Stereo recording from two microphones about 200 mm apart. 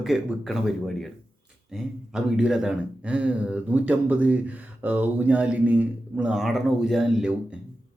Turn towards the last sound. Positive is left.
turn(degrees=0)  # may be behind; listen again after turning